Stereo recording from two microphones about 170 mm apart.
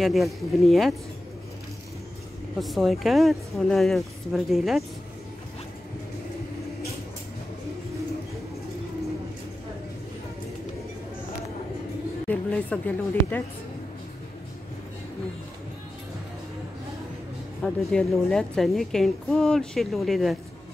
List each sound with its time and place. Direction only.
0.0 s a woman's voice: centre (ahead or behind)
2.6 s a woman's voice: centre (ahead or behind)
12.3 s a woman's voice: 10° left (ahead or behind)
17.6 s a woman's voice: centre (ahead or behind)